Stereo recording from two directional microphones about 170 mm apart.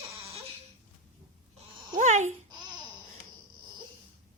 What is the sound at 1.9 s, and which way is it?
Speech, 45° right (ahead or behind).